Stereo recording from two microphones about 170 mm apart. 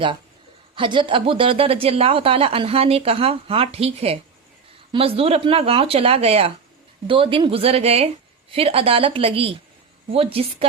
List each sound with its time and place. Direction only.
0.8 s speech: 30° right (ahead or behind)